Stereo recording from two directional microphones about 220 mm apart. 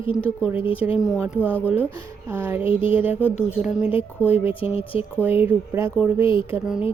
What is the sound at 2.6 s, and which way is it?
Speech, 25° left (ahead or behind).